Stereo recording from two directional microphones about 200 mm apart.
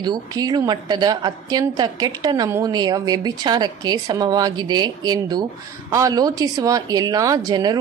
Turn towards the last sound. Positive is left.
turn(degrees=-20)  # may be behind; listen again after turning